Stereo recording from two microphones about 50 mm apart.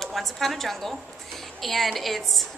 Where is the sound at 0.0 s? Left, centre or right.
Centre.